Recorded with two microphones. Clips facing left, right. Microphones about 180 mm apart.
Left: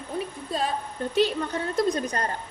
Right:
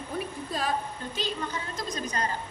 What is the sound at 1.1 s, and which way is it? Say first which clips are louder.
A woman's voice: left 10 dB; 65° left (ahead or behind).